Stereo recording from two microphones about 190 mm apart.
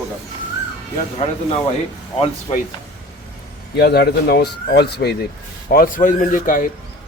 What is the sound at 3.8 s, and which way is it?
A man's voice, 60° left (ahead or behind).